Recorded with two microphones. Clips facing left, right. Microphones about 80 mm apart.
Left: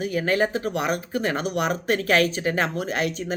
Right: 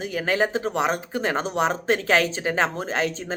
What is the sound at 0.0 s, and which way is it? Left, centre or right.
Speech, right.